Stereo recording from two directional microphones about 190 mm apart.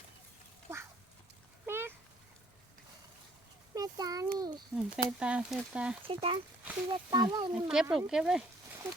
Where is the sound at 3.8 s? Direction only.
20° right (ahead or behind).